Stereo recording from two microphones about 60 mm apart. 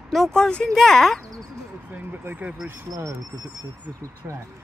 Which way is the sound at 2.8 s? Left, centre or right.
Right.